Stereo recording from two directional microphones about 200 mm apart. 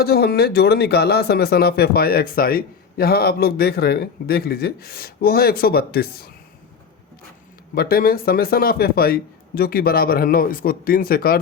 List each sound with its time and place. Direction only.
0.0 s speech: 50° left (ahead or behind)
7.8 s speech: 45° left (ahead or behind)